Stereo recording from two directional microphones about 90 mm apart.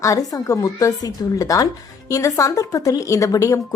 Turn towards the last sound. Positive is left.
turn(degrees=35)  # may be behind; listen again after turning